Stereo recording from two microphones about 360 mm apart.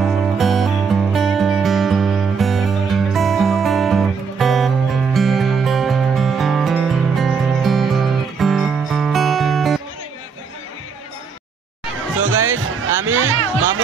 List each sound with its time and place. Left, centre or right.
0.0 s music: centre
12.2 s music: right